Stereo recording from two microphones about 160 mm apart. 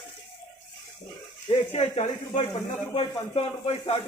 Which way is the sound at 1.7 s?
45° left (ahead or behind).